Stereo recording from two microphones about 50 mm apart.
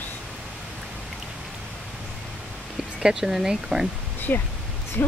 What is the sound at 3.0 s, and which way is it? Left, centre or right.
Speech, centre.